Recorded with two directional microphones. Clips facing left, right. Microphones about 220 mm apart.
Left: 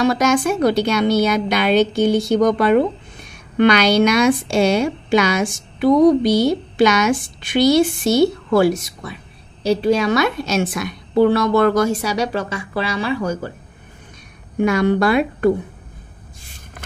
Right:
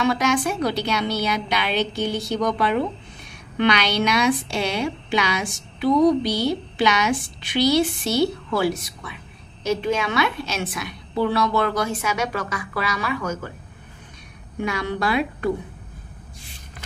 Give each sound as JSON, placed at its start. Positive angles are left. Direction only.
{"t": 0.0, "sound": "a woman's voice", "side_deg": 45}
{"t": 14.6, "sound": "a woman's voice", "side_deg": 50}